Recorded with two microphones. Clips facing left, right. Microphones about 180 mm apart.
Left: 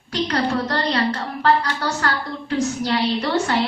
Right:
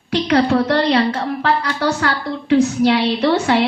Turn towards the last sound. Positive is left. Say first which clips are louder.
# right 5 dB
turn(degrees=-65)  # may be behind; listen again after turning